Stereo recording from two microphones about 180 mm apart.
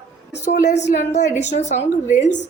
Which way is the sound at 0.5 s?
75° left (ahead or behind).